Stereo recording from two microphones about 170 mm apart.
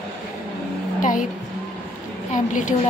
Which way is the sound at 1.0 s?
50° left (ahead or behind).